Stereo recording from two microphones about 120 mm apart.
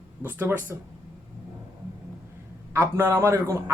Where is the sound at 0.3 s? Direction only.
15° right (ahead or behind).